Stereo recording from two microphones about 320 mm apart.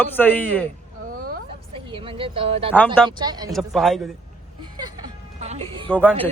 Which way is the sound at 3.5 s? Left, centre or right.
Centre.